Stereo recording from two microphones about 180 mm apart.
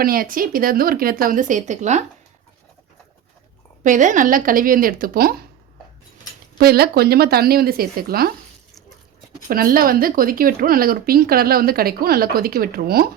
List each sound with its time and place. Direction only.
0.0 s speech: 55° right (ahead or behind)
3.8 s speech: 45° right (ahead or behind)
6.6 s speech: 60° right (ahead or behind)
9.5 s speech: 55° right (ahead or behind)